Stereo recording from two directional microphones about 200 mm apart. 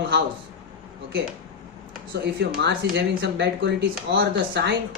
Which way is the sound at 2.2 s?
60° right (ahead or behind).